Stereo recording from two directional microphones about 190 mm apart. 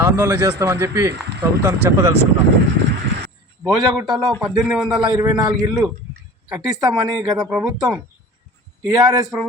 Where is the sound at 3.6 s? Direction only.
20° right (ahead or behind).